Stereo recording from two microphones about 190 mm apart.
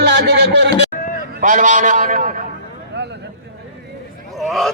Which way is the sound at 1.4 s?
40° right (ahead or behind).